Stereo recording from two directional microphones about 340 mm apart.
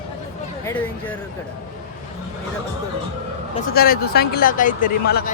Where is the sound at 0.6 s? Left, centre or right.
Centre.